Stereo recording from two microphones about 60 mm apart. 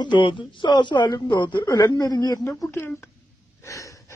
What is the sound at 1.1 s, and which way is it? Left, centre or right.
A man's voice, left.